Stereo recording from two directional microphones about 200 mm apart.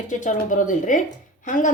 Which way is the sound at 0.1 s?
40° left (ahead or behind).